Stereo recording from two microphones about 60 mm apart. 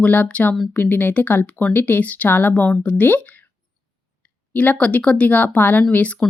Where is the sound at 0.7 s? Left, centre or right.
Left.